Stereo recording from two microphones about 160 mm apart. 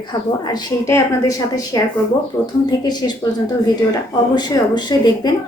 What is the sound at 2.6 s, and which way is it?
Speech, 25° left (ahead or behind).